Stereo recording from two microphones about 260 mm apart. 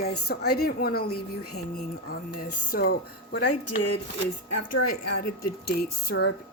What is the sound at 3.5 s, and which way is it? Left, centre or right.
A woman's voice, left.